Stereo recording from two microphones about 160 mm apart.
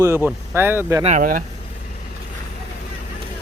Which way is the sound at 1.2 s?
60° right (ahead or behind).